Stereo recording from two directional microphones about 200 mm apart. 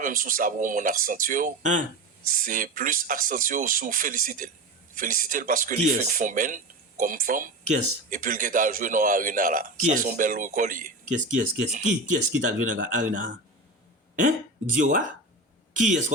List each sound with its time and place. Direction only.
0.0 s speech: 45° right (ahead or behind)
14.8 s speech: 40° right (ahead or behind)